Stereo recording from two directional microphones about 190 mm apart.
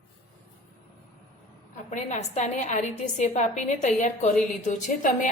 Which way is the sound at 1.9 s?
40° left (ahead or behind).